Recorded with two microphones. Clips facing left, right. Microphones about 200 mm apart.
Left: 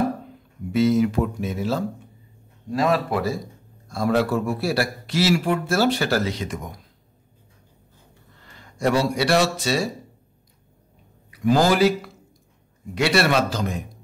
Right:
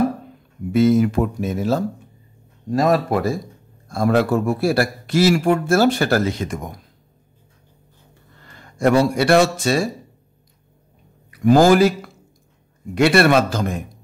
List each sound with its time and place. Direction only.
0.7 s a man's voice: 50° right (ahead or behind)
8.7 s a man's voice: 50° right (ahead or behind)
11.2 s a man's voice: 50° right (ahead or behind)
12.9 s a man's voice: 55° right (ahead or behind)